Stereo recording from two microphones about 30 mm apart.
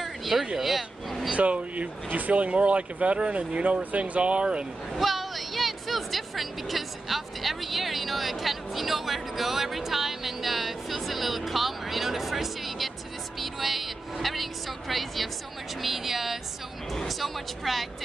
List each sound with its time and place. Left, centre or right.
0.0 s a sound: centre
0.6 s speech: centre
1.3 s speech: right
2.0 s speech: right
4.9 s music: centre
15.8 s a sound: centre
17.2 s speech: centre